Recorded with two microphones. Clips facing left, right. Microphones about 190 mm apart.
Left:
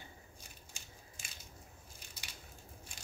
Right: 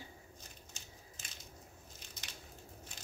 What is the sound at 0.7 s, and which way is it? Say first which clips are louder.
Crushing: right 1 dB; 10° left (ahead or behind).